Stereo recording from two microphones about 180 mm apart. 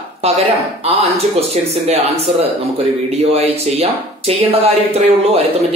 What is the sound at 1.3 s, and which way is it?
Speech, 35° right (ahead or behind).